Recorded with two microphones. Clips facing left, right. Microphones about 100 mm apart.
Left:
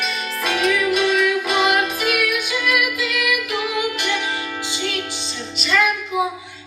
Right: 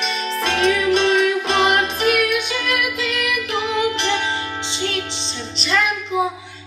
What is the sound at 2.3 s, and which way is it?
Music, centre (ahead or behind).